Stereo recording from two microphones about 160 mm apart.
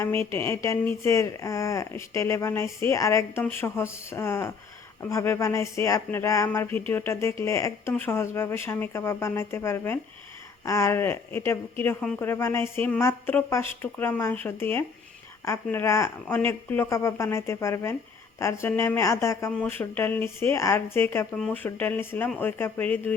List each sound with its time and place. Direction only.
0.0 s speech: 15° left (ahead or behind)